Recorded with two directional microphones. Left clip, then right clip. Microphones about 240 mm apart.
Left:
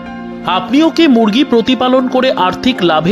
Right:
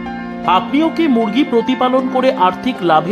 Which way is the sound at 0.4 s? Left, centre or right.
Centre.